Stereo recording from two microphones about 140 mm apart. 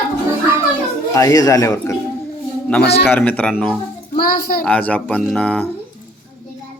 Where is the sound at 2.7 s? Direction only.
10° left (ahead or behind).